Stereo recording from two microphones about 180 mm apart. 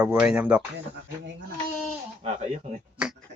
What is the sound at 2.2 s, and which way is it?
Speech, 40° right (ahead or behind).